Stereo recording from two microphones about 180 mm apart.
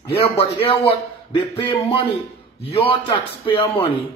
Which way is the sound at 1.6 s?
25° left (ahead or behind).